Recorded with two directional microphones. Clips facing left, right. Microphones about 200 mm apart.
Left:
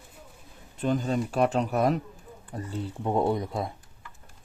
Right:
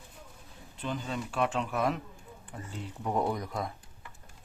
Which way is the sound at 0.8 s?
45° left (ahead or behind).